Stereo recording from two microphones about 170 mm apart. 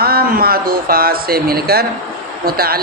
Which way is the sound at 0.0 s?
65° right (ahead or behind).